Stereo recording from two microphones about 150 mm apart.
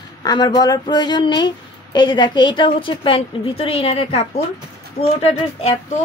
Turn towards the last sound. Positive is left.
turn(degrees=40)  # may be behind; listen again after turning